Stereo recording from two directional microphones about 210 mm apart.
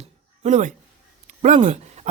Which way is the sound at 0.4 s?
35° right (ahead or behind).